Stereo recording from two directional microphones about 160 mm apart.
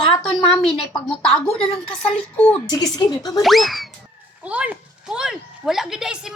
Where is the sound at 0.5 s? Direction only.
Centre (ahead or behind).